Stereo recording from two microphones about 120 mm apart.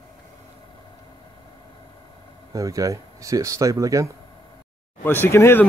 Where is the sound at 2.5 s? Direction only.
25° right (ahead or behind).